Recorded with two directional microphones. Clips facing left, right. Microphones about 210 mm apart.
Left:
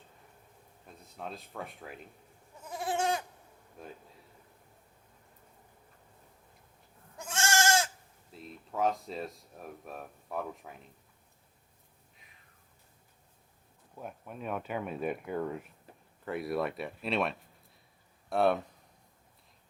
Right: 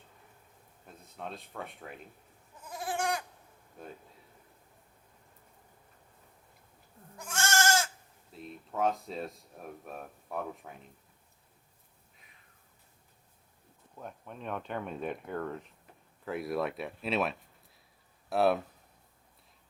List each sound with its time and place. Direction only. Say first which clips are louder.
1.0 s speech: even; centre (ahead or behind)
2.6 s goat: left 2 dB; 25° left (ahead or behind)
3.8 s speech: right 1 dB; centre (ahead or behind)
7.3 s goat: left 1 dB; 30° left (ahead or behind)
8.3 s speech: right 1 dB; centre (ahead or behind)
13.9 s speech: left 2 dB; 10° left (ahead or behind)